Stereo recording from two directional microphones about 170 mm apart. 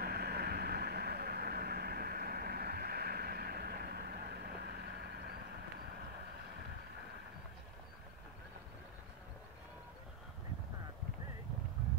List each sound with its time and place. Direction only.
0.0 s vehicle: 70° right (ahead or behind)